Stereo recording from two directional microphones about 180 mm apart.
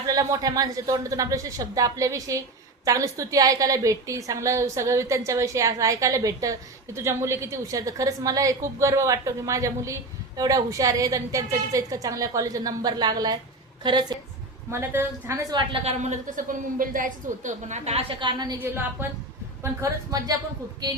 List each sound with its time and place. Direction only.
0.1 s a woman's voice: 20° right (ahead or behind)
14.7 s a woman's voice: 15° right (ahead or behind)
18.6 s a woman's voice: 10° right (ahead or behind)